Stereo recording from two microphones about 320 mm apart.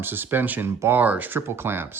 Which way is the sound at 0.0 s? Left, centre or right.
Centre.